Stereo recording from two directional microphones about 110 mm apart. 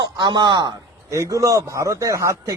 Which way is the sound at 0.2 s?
45° right (ahead or behind).